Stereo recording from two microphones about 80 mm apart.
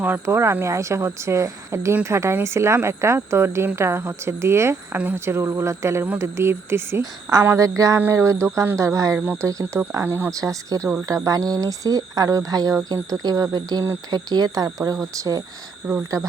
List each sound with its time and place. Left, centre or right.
0.3 s a woman's voice: right
9.1 s speech: centre
9.4 s a woman's voice: right
10.0 s speech: right
10.2 s speech: right